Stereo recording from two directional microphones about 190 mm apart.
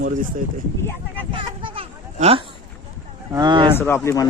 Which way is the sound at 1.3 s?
25° right (ahead or behind).